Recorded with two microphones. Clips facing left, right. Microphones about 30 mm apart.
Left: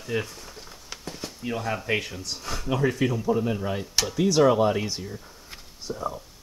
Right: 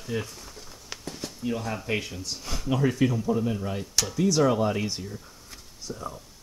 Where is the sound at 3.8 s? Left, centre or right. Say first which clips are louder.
Left 1 dB; centre.